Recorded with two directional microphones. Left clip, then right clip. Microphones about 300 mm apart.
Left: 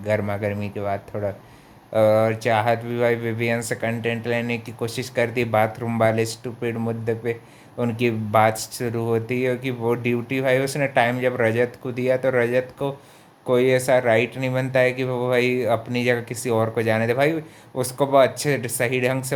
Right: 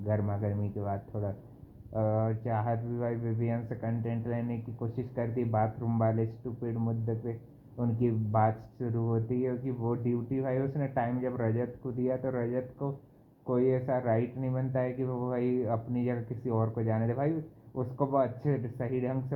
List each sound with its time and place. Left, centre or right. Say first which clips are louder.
0.1 s speech: left 11 dB; left